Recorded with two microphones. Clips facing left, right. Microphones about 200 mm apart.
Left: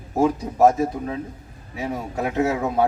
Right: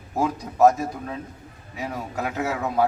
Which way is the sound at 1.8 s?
25° left (ahead or behind).